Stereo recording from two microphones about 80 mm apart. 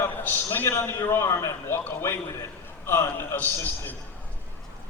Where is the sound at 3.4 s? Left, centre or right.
Left.